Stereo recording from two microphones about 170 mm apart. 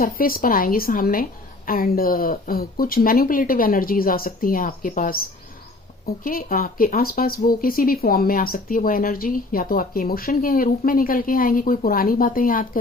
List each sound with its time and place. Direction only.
0.0 s speech: 60° left (ahead or behind)